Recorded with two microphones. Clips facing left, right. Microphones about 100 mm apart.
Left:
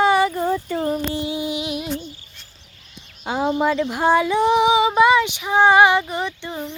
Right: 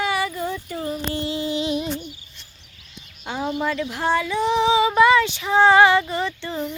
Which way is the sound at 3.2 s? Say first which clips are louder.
Left 5 dB; 35° left (ahead or behind).